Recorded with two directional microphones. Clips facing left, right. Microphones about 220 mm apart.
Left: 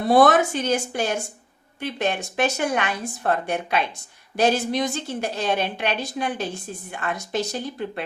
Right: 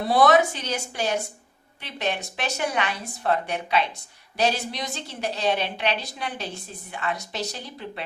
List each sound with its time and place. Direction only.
0.1 s a woman's voice: 50° left (ahead or behind)